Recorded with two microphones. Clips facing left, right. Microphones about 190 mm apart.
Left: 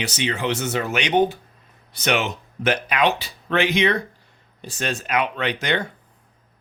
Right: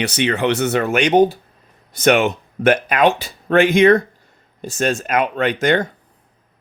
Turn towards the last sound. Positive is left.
turn(degrees=-45)  # may be behind; listen again after turning